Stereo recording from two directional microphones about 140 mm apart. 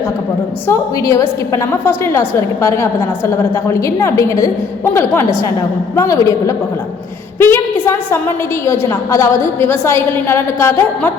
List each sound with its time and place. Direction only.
0.7 s a woman's voice: 20° left (ahead or behind)
6.0 s a woman's voice: 25° left (ahead or behind)
7.3 s a sound: 15° left (ahead or behind)
8.6 s a woman's voice: 20° left (ahead or behind)